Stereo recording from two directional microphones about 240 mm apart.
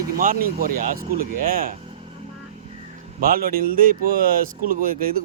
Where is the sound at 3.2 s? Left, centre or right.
Right.